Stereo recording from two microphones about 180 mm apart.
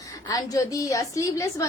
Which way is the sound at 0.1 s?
20° left (ahead or behind).